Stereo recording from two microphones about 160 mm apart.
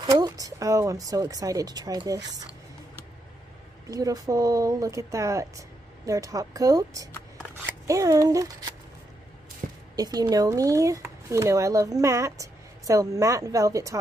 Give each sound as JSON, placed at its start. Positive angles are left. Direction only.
{"t": 0.0, "sound": "speech", "side_deg": -25}
{"t": 3.9, "sound": "speech", "side_deg": -20}
{"t": 9.9, "sound": "speech", "side_deg": -25}